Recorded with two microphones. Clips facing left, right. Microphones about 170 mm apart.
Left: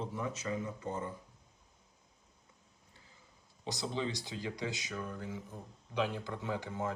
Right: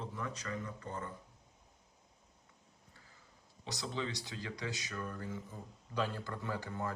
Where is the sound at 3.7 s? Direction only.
20° left (ahead or behind).